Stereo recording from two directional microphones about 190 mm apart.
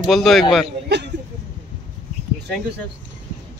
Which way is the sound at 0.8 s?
65° right (ahead or behind).